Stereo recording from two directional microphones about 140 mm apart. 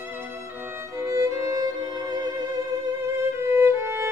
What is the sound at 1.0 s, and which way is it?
Music, 20° right (ahead or behind).